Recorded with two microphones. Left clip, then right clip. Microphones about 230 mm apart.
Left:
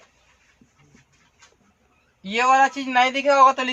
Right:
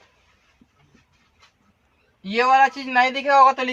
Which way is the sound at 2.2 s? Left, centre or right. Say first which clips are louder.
Right 1 dB; left.